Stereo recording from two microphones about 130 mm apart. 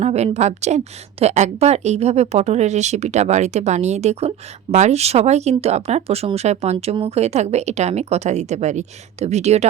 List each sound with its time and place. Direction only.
0.0 s a woman's voice: 55° right (ahead or behind)